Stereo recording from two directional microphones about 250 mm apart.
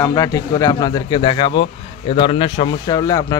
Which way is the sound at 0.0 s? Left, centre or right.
Centre.